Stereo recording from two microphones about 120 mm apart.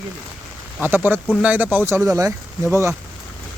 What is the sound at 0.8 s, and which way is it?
Speech, 15° right (ahead or behind).